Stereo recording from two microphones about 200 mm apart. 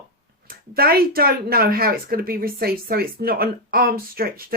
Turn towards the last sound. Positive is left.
turn(degrees=-50)  # may be behind; listen again after turning